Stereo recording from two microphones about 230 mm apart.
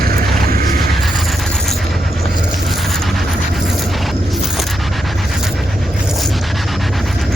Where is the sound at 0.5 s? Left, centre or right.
Right.